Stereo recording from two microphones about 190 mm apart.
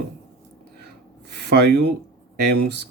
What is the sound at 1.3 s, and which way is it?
Speech, 60° right (ahead or behind).